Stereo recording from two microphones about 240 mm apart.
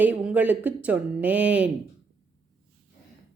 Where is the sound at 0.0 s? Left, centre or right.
Centre.